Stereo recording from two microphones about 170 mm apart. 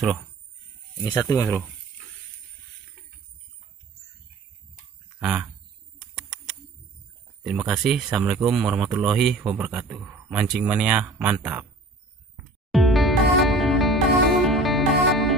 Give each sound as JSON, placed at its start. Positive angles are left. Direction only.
{"t": 0.0, "sound": "speech", "side_deg": 0}
{"t": 1.0, "sound": "speech", "side_deg": 20}
{"t": 5.2, "sound": "speech", "side_deg": -5}
{"t": 7.4, "sound": "speech", "side_deg": -5}
{"t": 12.7, "sound": "music", "side_deg": 0}